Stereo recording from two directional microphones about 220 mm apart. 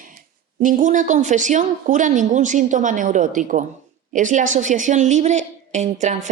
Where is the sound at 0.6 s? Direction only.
35° right (ahead or behind).